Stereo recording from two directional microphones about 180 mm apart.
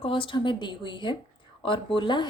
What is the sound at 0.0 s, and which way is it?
A woman's voice, 30° left (ahead or behind).